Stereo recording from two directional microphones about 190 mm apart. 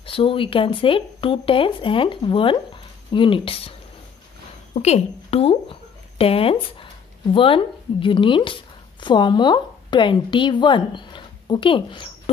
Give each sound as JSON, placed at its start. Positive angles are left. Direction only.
{"t": 0.0, "sound": "speech", "side_deg": 30}
{"t": 4.7, "sound": "a woman's voice", "side_deg": 35}